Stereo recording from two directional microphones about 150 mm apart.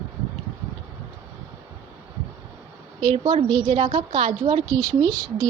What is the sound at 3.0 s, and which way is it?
A woman's voice, 30° right (ahead or behind).